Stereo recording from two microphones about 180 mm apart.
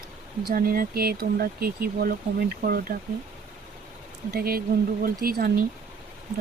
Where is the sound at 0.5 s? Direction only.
50° right (ahead or behind).